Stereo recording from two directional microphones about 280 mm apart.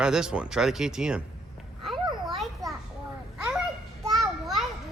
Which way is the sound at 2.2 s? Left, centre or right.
Centre.